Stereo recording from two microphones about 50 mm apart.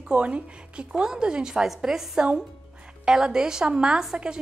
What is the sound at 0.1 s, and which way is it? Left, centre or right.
A woman's voice, right.